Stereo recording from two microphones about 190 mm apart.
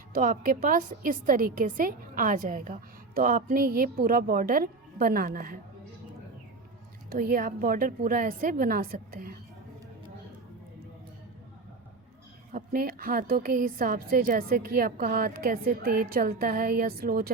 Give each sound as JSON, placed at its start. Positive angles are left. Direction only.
{"t": 0.1, "sound": "a woman's voice", "side_deg": -45}
{"t": 7.1, "sound": "a woman's voice", "side_deg": -50}
{"t": 12.5, "sound": "a woman's voice", "side_deg": -50}